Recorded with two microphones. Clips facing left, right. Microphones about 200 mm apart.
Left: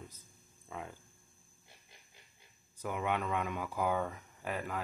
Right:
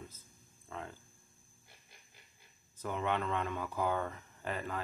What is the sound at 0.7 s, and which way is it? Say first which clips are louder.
Speech: even; 10° left (ahead or behind).